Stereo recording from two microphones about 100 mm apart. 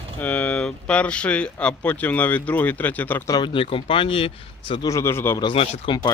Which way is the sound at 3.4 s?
60° left (ahead or behind).